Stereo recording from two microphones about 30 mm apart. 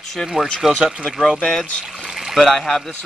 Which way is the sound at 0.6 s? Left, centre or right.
Centre.